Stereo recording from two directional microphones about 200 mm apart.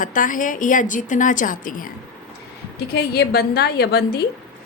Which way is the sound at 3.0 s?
50° left (ahead or behind).